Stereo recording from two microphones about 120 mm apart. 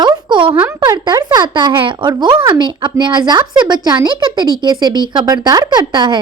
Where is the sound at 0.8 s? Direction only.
35° right (ahead or behind).